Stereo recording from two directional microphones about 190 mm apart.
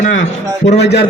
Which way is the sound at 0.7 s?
60° left (ahead or behind).